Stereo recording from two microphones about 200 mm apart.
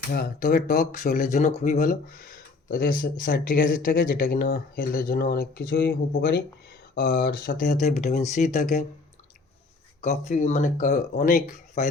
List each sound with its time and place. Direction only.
0.1 s speech: 45° left (ahead or behind)
7.9 s speech: 35° left (ahead or behind)
10.0 s speech: 35° left (ahead or behind)